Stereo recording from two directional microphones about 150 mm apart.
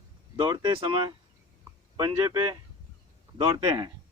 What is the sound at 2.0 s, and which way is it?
Speech, 30° right (ahead or behind).